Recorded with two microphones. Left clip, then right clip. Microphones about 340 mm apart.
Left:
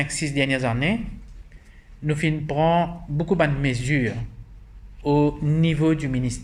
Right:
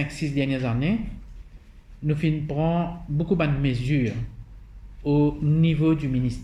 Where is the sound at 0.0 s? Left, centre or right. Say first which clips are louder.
Left 4 dB; left.